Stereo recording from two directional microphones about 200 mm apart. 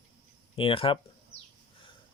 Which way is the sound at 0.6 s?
25° left (ahead or behind).